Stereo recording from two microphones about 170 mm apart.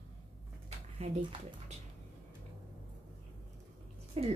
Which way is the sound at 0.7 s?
35° right (ahead or behind).